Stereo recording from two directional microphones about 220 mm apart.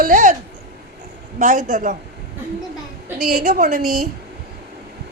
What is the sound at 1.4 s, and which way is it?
Speech, 35° right (ahead or behind).